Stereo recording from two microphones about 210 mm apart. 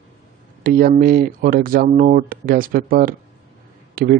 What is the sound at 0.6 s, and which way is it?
A man's voice, 40° right (ahead or behind).